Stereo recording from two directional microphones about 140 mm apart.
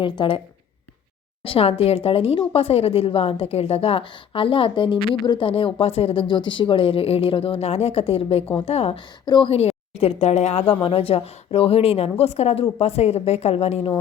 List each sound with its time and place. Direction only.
0.0 s speech: 40° left (ahead or behind)
1.5 s speech: 45° left (ahead or behind)
9.2 s speech: 30° left (ahead or behind)
9.5 s speech: 45° left (ahead or behind)